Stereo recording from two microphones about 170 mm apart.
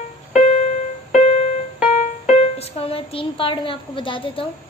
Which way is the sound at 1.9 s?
45° left (ahead or behind).